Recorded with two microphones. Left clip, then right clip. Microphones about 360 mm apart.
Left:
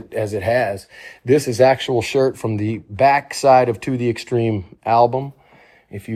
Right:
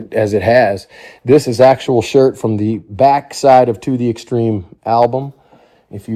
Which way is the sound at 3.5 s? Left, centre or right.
Centre.